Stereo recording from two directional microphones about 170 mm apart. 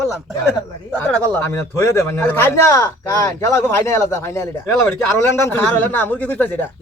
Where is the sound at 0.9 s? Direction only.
15° left (ahead or behind).